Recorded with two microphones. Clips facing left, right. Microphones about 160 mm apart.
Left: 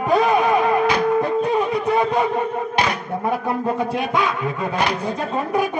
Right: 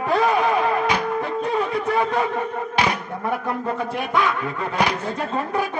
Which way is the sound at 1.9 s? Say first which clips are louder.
Left 3 dB; 15° left (ahead or behind).